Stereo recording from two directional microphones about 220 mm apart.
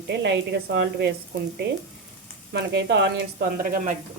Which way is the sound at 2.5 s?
50° right (ahead or behind).